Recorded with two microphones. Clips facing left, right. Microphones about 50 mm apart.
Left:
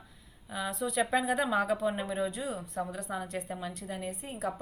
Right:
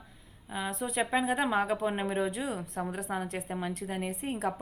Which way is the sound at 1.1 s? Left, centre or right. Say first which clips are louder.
Right 2 dB; right.